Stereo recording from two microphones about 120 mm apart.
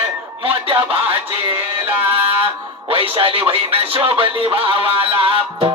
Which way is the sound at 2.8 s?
50° right (ahead or behind).